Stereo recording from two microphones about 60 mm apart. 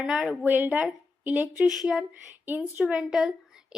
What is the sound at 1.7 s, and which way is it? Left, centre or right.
Speech, centre.